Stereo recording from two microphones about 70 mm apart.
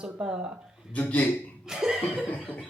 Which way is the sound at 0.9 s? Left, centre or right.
Left.